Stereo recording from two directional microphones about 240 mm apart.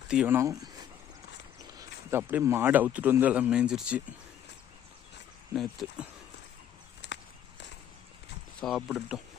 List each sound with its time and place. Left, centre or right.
0.1 s speech: centre
5.8 s speech: centre
7.0 s a sound: left
8.6 s speech: centre